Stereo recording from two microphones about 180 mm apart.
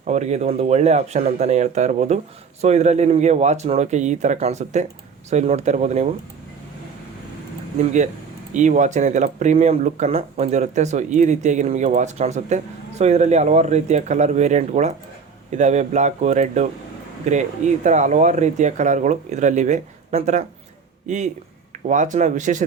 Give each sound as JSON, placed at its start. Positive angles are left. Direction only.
{"t": 0.0, "sound": "speech", "side_deg": -40}
{"t": 7.8, "sound": "speech", "side_deg": -40}